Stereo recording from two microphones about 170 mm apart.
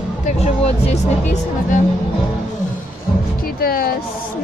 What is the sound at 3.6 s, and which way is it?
Music, 60° left (ahead or behind).